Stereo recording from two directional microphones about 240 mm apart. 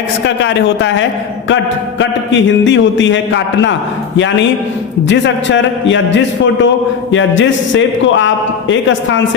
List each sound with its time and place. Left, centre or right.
0.4 s a man's voice: left
5.0 s a man's voice: left